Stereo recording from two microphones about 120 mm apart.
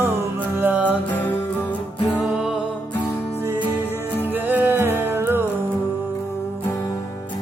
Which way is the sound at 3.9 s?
15° left (ahead or behind).